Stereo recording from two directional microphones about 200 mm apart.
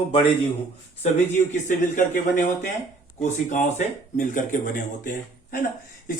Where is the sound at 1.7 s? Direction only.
40° left (ahead or behind).